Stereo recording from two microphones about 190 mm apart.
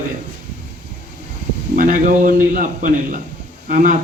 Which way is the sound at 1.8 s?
45° right (ahead or behind).